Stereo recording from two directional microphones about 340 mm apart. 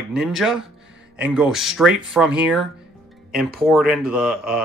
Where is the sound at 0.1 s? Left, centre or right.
Centre.